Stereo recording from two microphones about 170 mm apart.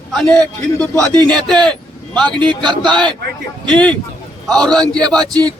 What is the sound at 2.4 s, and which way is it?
Speech, 25° right (ahead or behind).